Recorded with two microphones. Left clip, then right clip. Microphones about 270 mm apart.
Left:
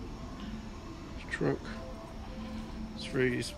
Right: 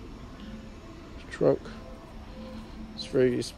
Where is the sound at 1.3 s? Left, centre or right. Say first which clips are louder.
Right 8 dB; centre.